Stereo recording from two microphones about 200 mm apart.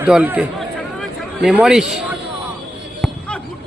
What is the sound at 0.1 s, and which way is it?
Speech, 5° right (ahead or behind).